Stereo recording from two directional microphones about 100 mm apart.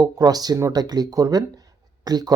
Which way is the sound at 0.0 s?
40° right (ahead or behind).